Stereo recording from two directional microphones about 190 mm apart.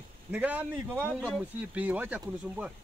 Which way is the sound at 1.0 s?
5° left (ahead or behind).